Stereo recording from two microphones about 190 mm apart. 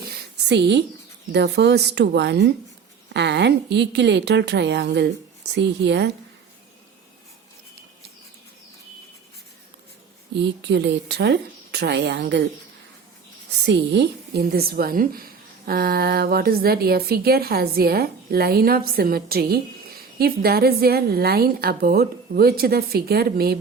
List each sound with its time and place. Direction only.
0.4 s a woman's voice: 65° right (ahead or behind)
10.3 s a woman's voice: 65° right (ahead or behind)
13.6 s a woman's voice: 65° right (ahead or behind)